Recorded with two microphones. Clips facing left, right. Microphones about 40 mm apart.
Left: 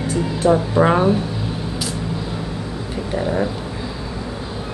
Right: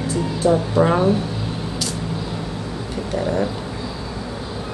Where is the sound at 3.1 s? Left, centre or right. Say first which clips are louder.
Left 1 dB; centre.